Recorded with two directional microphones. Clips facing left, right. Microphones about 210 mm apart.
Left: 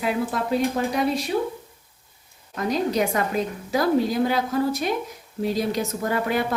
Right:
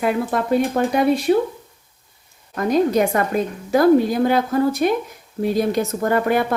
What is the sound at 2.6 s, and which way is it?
Speech, 50° right (ahead or behind).